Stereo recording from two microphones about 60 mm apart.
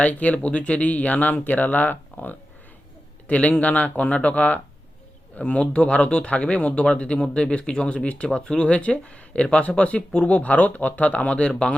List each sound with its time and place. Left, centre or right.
0.0 s speech: left